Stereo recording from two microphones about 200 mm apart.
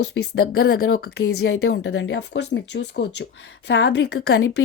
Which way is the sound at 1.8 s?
65° left (ahead or behind).